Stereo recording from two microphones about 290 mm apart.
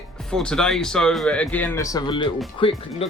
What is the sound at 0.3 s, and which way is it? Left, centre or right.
Speech, centre.